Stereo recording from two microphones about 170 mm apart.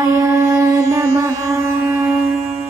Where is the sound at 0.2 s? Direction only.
20° right (ahead or behind).